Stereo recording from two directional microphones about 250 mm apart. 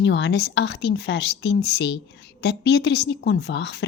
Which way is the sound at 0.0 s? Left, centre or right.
Left.